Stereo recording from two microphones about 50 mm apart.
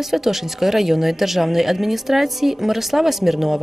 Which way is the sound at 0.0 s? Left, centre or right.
Centre.